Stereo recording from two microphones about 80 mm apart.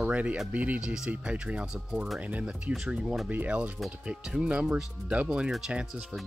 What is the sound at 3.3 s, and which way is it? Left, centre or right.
Speech, centre.